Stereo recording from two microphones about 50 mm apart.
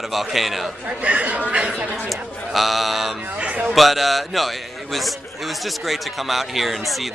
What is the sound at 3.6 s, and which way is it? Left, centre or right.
A man's voice, centre.